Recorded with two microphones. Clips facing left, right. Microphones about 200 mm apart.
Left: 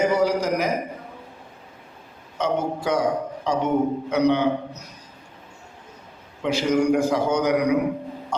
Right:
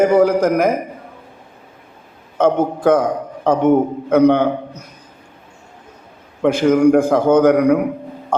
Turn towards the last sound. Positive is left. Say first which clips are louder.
# right 8 dB
turn(degrees=-55)  # may be behind; listen again after turning